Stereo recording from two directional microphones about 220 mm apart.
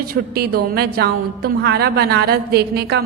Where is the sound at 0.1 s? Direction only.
45° right (ahead or behind).